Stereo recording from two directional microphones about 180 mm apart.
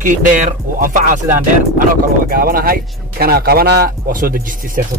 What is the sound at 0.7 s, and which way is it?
Speech, 50° right (ahead or behind).